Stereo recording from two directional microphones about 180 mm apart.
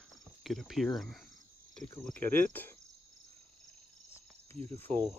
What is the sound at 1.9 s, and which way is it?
Cricket, 10° left (ahead or behind).